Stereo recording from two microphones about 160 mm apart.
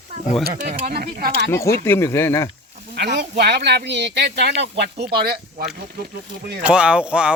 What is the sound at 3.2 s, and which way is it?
Speech, 90° right.